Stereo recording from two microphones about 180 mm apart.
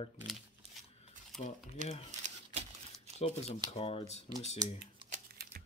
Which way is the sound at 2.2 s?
40° right (ahead or behind).